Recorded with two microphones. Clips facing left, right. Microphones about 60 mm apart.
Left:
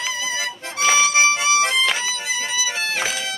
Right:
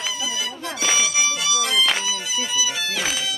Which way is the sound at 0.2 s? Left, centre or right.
Left.